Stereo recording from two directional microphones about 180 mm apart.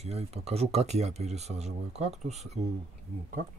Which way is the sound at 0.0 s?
35° right (ahead or behind).